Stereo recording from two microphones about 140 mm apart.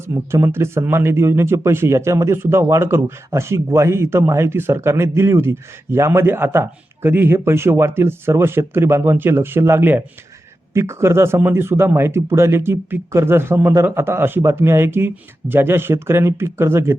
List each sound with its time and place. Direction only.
0.1 s speech: 20° right (ahead or behind)